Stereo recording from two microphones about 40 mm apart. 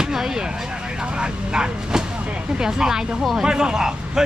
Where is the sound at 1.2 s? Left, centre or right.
Right.